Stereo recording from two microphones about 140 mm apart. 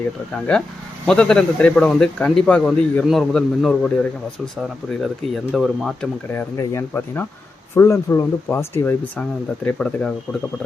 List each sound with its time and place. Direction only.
1.0 s a man's voice: 5° left (ahead or behind)
4.9 s a man's voice: centre (ahead or behind)
6.3 s speech: 15° left (ahead or behind)
9.6 s a man's voice: 5° left (ahead or behind)